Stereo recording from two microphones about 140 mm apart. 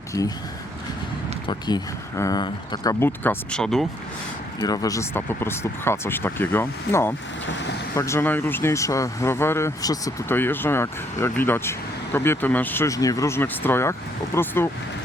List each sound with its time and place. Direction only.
0.1 s speech: 25° left (ahead or behind)
1.5 s speech: 30° left (ahead or behind)
3.0 s speech: 15° left (ahead or behind)
4.6 s speech: 25° left (ahead or behind)